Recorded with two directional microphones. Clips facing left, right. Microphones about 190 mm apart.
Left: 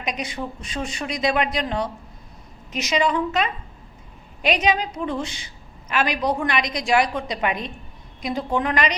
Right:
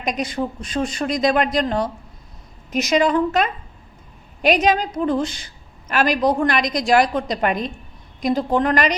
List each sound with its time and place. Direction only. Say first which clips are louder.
0.0 s a woman's voice: right 5 dB; 40° right (ahead or behind)